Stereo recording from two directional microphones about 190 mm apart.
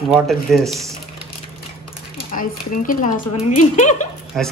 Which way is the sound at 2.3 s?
45° left (ahead or behind).